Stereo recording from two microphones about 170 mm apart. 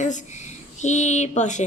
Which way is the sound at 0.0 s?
45° left (ahead or behind).